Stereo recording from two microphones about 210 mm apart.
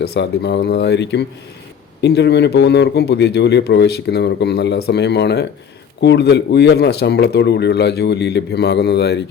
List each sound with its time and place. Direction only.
0.0 s a man's voice: 50° left (ahead or behind)